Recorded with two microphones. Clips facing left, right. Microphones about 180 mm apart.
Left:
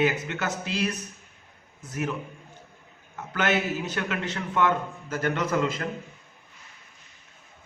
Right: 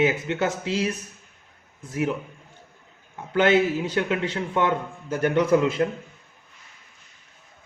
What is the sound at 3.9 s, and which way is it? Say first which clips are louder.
Speech: right 5 dB; 25° right (ahead or behind).